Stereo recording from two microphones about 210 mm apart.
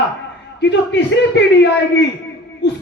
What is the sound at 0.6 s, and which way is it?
Speech, 55° left (ahead or behind).